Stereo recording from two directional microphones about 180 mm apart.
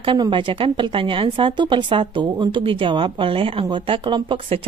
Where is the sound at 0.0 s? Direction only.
25° right (ahead or behind).